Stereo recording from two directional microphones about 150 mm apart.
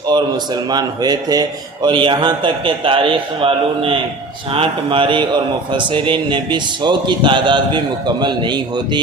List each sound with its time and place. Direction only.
0.1 s speech: 30° right (ahead or behind)